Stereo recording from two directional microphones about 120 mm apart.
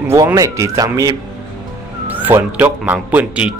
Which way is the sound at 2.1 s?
15° right (ahead or behind).